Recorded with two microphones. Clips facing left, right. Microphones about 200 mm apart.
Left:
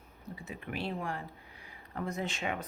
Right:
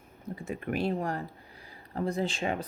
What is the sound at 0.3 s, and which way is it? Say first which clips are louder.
Speech: right 8 dB; 50° right (ahead or behind).